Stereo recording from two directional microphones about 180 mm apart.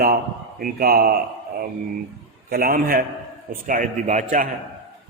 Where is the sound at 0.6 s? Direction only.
55° right (ahead or behind).